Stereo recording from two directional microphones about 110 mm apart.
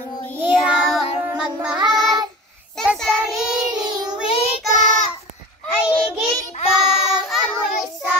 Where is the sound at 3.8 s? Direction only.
40° right (ahead or behind).